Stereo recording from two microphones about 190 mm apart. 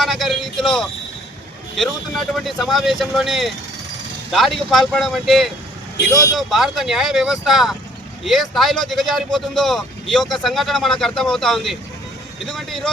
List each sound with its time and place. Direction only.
0.0 s speech: centre (ahead or behind)